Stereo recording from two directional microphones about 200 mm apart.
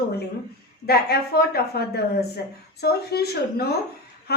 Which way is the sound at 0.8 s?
50° left (ahead or behind).